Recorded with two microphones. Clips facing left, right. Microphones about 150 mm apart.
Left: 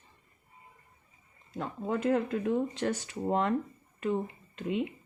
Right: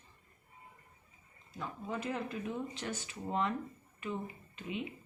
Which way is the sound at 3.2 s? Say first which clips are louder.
Left 6 dB; 70° left (ahead or behind).